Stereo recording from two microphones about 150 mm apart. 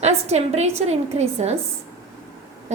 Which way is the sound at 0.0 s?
45° right (ahead or behind).